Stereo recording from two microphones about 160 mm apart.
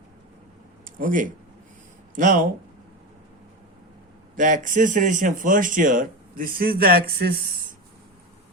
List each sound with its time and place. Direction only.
0.9 s speech: 60° right (ahead or behind)
4.4 s speech: 55° right (ahead or behind); by 7.3 s 75° right (ahead or behind)